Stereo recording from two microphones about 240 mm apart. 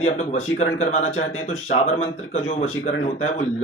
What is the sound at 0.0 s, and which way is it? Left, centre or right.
A man's voice, left.